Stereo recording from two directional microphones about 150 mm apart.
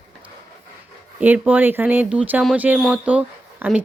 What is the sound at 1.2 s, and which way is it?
Speech, 10° right (ahead or behind).